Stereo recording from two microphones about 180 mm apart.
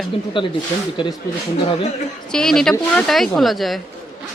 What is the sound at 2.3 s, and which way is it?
Speech, 5° left (ahead or behind).